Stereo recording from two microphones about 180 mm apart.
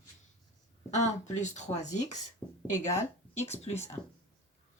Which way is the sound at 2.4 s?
Centre (ahead or behind).